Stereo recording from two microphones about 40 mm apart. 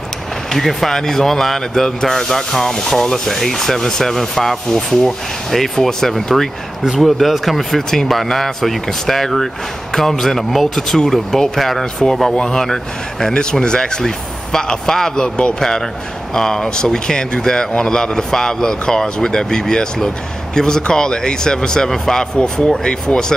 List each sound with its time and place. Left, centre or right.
0.5 s speech: centre
22.8 s speech: left